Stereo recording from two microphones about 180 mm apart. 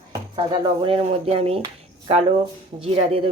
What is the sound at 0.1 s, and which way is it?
Speech, 25° right (ahead or behind).